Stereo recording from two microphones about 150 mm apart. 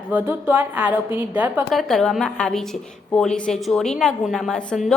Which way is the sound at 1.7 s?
Centre (ahead or behind).